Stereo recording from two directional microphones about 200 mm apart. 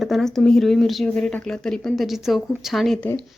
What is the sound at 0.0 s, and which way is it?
Speech, centre (ahead or behind).